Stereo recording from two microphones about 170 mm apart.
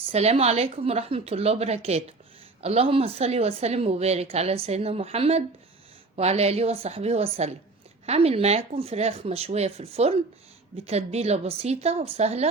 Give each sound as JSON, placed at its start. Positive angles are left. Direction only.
{"t": 0.1, "sound": "a woman's voice", "side_deg": -40}